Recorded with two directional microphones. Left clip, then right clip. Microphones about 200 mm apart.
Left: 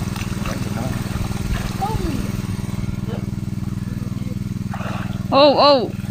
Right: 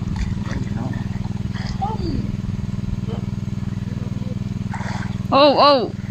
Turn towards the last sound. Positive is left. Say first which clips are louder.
# even
turn(degrees=0)  # may be behind; listen again after turning